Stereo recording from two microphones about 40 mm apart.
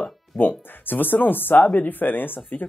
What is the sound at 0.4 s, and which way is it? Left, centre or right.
Speech, left.